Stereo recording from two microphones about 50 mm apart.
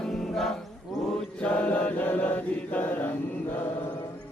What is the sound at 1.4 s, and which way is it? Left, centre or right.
Mantra, left.